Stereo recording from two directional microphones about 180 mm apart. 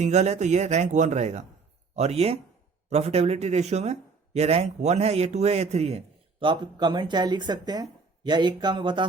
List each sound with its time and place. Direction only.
0.0 s a man's voice: 40° right (ahead or behind)